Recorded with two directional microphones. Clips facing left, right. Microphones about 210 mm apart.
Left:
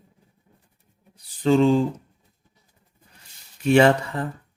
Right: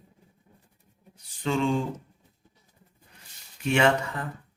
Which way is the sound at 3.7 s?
35° left (ahead or behind).